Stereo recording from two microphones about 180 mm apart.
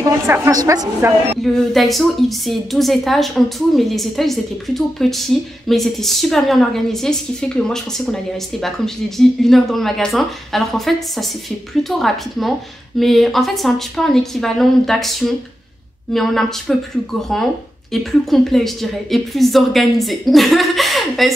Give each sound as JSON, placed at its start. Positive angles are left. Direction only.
{"t": 0.3, "sound": "a woman's voice", "side_deg": -20}
{"t": 1.4, "sound": "a woman's voice", "side_deg": 0}